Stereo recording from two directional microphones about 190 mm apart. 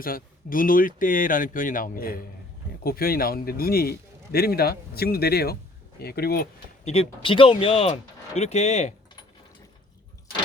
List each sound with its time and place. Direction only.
0.0 s a man's voice: 45° left (ahead or behind)
6.8 s speech: 30° left (ahead or behind)